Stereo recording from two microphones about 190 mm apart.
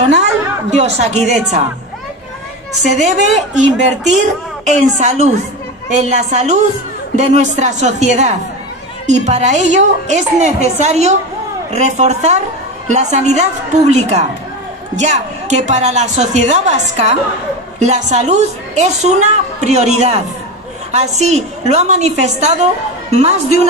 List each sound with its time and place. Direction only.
0.1 s a woman's voice: 35° right (ahead or behind)
3.0 s a woman's voice: 40° right (ahead or behind)